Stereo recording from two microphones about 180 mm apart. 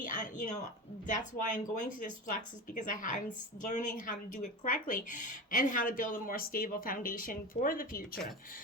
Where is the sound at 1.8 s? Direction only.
50° left (ahead or behind).